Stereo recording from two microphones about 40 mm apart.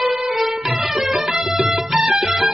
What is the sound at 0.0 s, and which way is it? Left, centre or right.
Music, centre.